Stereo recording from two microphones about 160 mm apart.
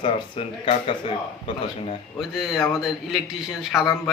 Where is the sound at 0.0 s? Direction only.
35° left (ahead or behind).